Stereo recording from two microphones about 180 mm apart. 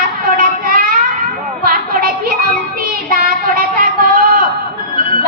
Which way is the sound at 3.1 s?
55° right (ahead or behind).